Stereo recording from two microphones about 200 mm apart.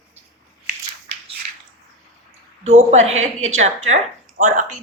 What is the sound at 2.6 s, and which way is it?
A woman's voice, 35° right (ahead or behind).